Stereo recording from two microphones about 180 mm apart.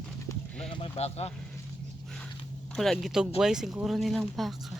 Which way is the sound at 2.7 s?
Centre (ahead or behind).